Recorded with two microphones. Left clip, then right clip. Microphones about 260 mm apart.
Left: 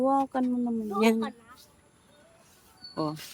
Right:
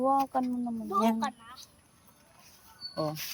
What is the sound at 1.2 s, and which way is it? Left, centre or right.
Speech, centre.